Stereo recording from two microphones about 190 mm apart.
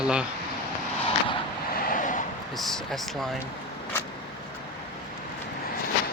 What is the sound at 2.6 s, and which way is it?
Speech, centre (ahead or behind).